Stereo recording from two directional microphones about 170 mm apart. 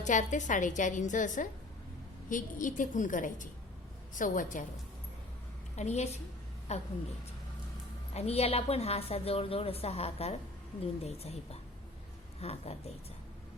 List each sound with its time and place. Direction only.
0.0 s a woman's voice: 45° left (ahead or behind)
5.7 s a woman's voice: 40° left (ahead or behind)
8.1 s a woman's voice: 35° left (ahead or behind)
12.4 s a woman's voice: 35° left (ahead or behind)